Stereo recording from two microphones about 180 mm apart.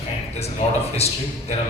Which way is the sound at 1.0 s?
35° left (ahead or behind).